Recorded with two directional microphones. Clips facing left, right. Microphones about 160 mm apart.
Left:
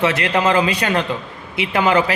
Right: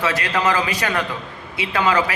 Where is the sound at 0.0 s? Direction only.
25° left (ahead or behind).